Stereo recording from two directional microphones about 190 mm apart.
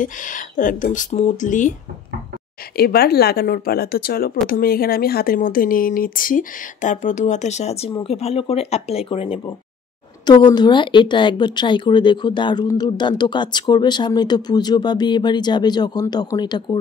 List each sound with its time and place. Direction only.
0.0 s speech: 45° left (ahead or behind)
2.8 s speech: 55° left (ahead or behind); by 16.7 s 25° left (ahead or behind)